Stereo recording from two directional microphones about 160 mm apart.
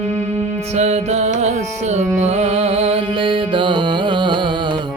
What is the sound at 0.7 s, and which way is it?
Music, 45° right (ahead or behind).